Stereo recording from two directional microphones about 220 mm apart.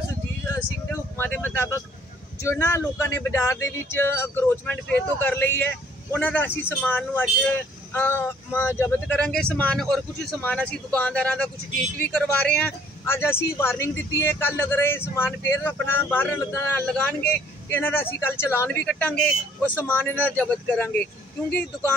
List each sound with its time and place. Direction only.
1.1 s vehicle: 10° left (ahead or behind)
2.4 s speech: 10° left (ahead or behind)